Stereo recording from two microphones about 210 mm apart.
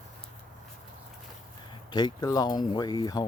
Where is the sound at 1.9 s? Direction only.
20° left (ahead or behind).